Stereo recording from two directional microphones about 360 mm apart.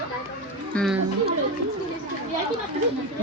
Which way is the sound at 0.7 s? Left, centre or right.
Centre.